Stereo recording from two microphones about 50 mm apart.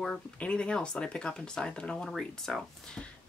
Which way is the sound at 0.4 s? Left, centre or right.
Left.